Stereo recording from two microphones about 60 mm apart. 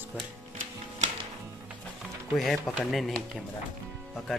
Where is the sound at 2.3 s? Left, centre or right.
Centre.